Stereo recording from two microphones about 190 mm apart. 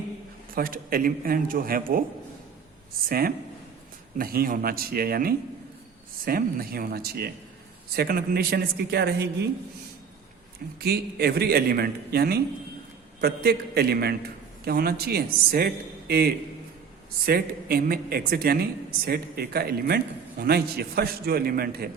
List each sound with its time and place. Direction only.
0.5 s speech: 50° right (ahead or behind)
3.1 s a man's voice: 50° right (ahead or behind)
10.8 s a man's voice: 55° right (ahead or behind)